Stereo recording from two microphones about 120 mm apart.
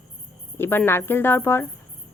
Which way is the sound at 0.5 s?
20° left (ahead or behind).